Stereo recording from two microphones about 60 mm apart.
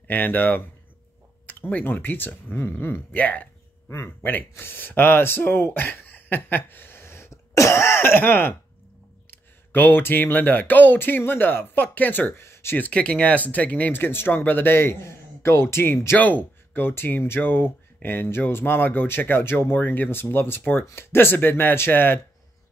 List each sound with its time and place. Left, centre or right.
0.1 s speech: left
3.2 s speech: left
12.7 s speech: left
13.9 s speech: left
16.2 s speech: left